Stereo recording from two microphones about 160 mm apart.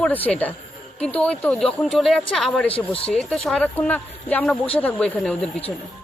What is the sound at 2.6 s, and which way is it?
Speech, 35° left (ahead or behind).